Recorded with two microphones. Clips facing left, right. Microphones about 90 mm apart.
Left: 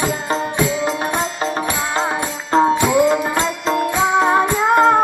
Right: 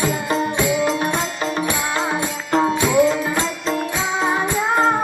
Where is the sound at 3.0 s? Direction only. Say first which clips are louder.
Left 3 dB; 50° left (ahead or behind).